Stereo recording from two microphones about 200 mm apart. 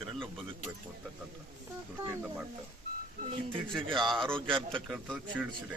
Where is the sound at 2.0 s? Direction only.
10° right (ahead or behind).